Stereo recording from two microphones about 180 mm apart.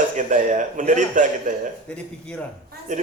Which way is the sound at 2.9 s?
45° right (ahead or behind).